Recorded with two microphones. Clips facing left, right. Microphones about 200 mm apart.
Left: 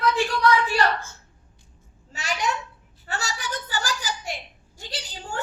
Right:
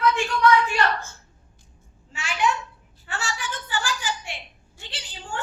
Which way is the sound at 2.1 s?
40° left (ahead or behind).